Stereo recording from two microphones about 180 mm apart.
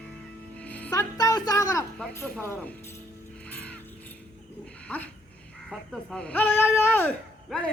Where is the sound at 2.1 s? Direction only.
10° left (ahead or behind).